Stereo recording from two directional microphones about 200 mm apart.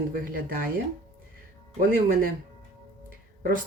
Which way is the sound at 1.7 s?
45° right (ahead or behind).